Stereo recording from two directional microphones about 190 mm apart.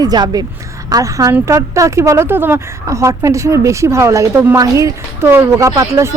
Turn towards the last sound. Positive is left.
turn(degrees=-15)  # may be behind; listen again after turning